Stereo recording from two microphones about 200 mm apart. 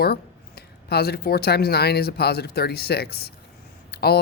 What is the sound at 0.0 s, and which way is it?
Speech, 50° left (ahead or behind).